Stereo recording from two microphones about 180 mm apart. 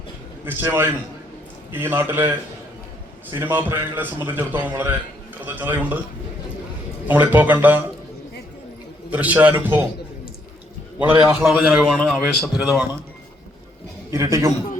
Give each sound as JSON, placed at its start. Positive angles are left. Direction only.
{"t": 0.4, "sound": "a man's voice", "side_deg": -10}
{"t": 3.3, "sound": "a man's voice", "side_deg": -10}
{"t": 7.1, "sound": "a man's voice", "side_deg": -10}
{"t": 9.0, "sound": "a man's voice", "side_deg": -10}
{"t": 11.0, "sound": "a man's voice", "side_deg": -10}
{"t": 14.1, "sound": "a man's voice", "side_deg": -20}